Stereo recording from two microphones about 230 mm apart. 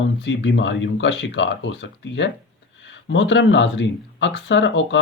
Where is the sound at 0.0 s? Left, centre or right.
Left.